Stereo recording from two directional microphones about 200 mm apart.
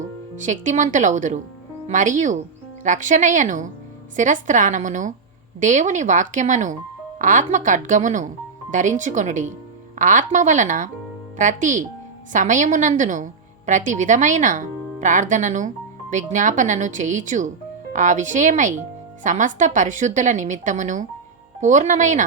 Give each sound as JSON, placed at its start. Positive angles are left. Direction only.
{"t": 0.3, "sound": "a woman's voice", "side_deg": -40}